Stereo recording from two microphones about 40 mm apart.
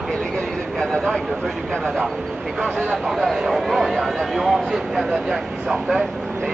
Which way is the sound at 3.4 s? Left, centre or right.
Centre.